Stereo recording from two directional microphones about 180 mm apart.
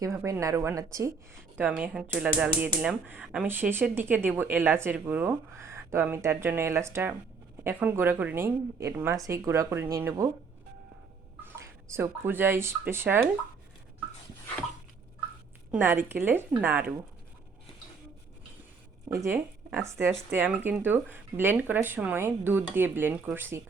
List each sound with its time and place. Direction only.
0.0 s speech: 15° right (ahead or behind)
11.9 s speech: 15° right (ahead or behind)
15.7 s speech: 10° right (ahead or behind)
19.2 s speech: 15° right (ahead or behind)